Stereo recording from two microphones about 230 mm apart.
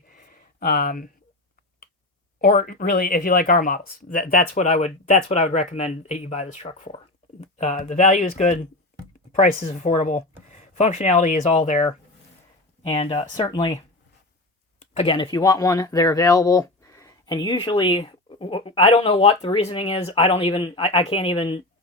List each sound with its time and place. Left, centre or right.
0.1 s a sound: left
2.4 s speech: left; by 13.7 s centre
14.8 s speech: left